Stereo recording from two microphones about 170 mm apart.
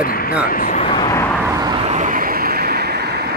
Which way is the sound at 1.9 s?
50° right (ahead or behind).